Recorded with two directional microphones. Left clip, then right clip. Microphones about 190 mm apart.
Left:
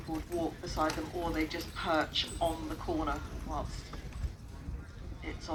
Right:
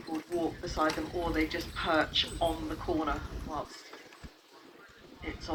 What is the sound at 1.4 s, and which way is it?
Speech, 70° left (ahead or behind).